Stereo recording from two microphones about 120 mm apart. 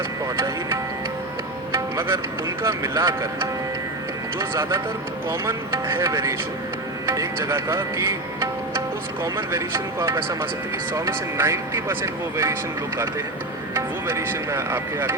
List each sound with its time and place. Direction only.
0.3 s speech: 25° right (ahead or behind)
1.7 s music: 25° right (ahead or behind)
2.6 s speech: 25° right (ahead or behind)
4.4 s speech: 25° right (ahead or behind)
9.2 s speech: 20° right (ahead or behind)
13.7 s speech: 20° right (ahead or behind)